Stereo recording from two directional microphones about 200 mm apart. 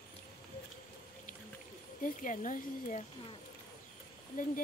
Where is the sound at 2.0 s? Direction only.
40° left (ahead or behind).